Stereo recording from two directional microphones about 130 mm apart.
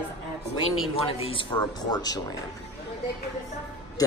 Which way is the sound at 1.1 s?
45° left (ahead or behind).